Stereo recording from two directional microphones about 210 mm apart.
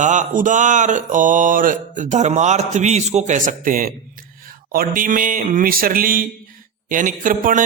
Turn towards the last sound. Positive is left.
turn(degrees=-40)  # may be behind; listen again after turning